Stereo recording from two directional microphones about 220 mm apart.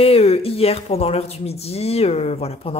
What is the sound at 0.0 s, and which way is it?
Speech, 25° left (ahead or behind).